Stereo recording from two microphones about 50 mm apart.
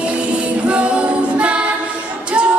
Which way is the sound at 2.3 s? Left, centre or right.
Right.